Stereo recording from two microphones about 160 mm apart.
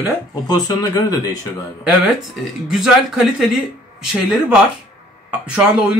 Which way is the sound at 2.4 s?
Centre (ahead or behind).